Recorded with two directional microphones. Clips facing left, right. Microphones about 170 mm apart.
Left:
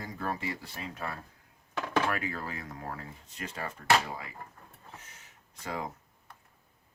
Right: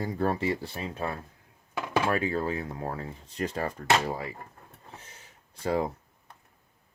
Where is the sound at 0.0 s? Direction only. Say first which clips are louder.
Right 8 dB; 35° right (ahead or behind).